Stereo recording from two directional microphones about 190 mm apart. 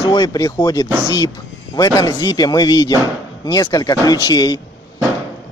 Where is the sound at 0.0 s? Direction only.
20° left (ahead or behind).